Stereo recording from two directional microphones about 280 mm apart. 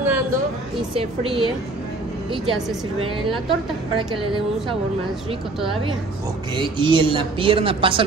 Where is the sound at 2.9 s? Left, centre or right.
Centre.